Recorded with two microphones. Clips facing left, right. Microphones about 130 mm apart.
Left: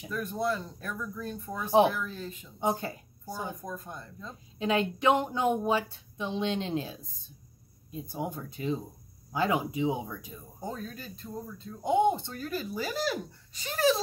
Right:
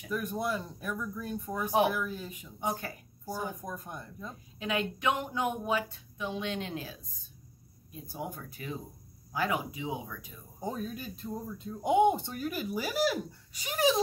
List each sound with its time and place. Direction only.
0.1 s speech: 10° right (ahead or behind)
2.6 s speech: 25° left (ahead or behind)
3.6 s speech: 15° right (ahead or behind)
4.6 s speech: 30° left (ahead or behind)
10.6 s speech: 15° right (ahead or behind)